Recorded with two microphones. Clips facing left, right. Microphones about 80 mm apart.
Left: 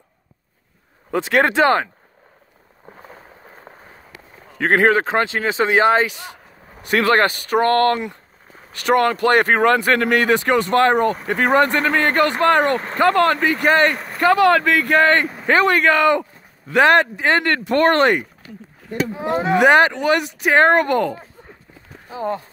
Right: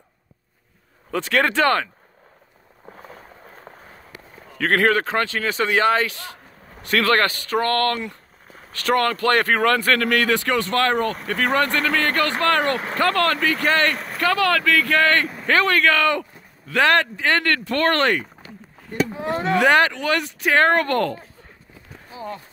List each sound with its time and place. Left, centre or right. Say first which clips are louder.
1.1 s speech: left 3 dB; left
3.7 s a sound: even; centre
4.6 s speech: left 3 dB; left
13.9 s a sound: even; centre
14.2 s speech: left 6 dB; left
19.2 s speech: left 4 dB; centre
22.1 s speech: left 8 dB; left